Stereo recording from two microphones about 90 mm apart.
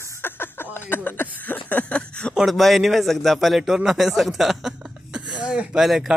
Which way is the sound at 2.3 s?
Centre (ahead or behind).